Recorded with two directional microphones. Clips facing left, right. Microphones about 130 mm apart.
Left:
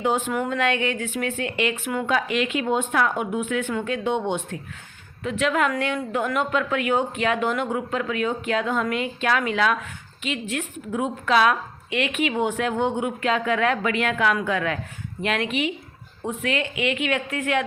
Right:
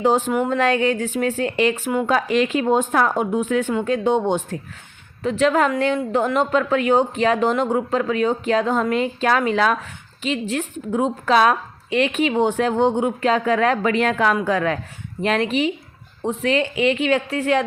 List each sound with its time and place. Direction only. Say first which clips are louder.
0.0 s a woman's voice: right 5 dB; 30° right (ahead or behind)